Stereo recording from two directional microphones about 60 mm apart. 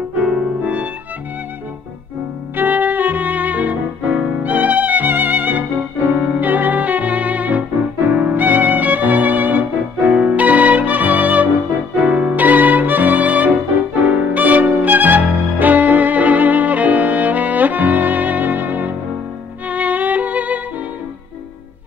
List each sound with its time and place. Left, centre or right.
0.2 s music: right
2.5 s music: right
8.1 s violin: right
10.1 s music: centre
12.0 s violin: right
14.0 s music: right